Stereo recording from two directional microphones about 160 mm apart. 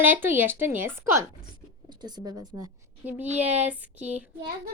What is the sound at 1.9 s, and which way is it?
Speech, 25° right (ahead or behind).